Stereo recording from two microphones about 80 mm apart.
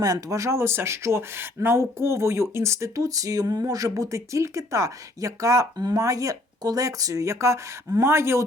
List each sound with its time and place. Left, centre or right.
0.0 s speech: right